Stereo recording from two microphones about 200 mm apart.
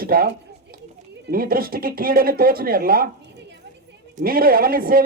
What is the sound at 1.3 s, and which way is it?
A child's voice, 45° right (ahead or behind).